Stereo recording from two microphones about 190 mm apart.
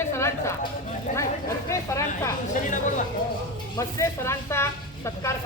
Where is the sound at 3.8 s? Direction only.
15° left (ahead or behind).